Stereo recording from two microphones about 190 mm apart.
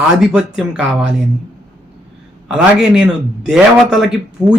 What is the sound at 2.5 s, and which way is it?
A man's voice, 5° right (ahead or behind).